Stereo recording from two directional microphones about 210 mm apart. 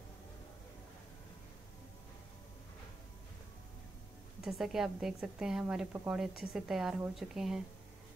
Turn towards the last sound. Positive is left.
turn(degrees=0)  # may be behind; listen again after turning